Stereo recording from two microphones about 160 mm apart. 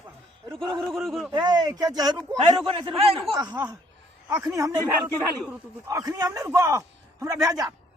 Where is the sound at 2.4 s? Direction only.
35° right (ahead or behind).